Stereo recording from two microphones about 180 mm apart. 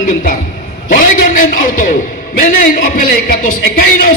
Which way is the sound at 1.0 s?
45° left (ahead or behind).